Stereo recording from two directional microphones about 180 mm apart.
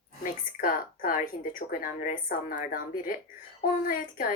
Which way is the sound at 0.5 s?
50° left (ahead or behind).